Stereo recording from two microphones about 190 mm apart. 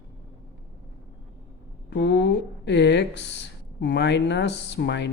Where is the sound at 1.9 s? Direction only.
65° left (ahead or behind).